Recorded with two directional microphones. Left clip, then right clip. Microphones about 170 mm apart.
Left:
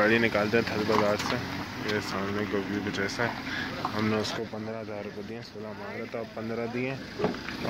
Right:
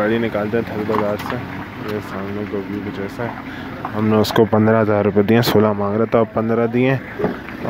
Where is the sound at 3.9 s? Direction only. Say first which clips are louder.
Right 15 dB; 30° right (ahead or behind).